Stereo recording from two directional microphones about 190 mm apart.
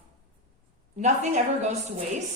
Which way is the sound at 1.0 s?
35° right (ahead or behind).